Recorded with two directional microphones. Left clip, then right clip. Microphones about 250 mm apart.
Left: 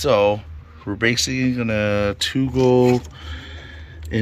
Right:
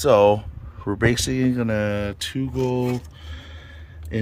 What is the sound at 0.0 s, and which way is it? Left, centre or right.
Speech, right.